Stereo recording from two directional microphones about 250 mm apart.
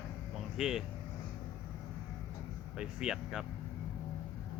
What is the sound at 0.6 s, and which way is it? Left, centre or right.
Speech, centre.